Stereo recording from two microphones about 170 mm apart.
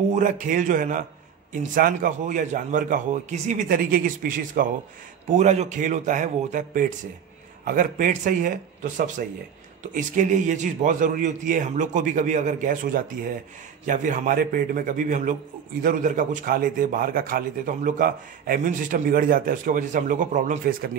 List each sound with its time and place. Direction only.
0.1 s a man's voice: 50° right (ahead or behind)
5.3 s a man's voice: 45° right (ahead or behind)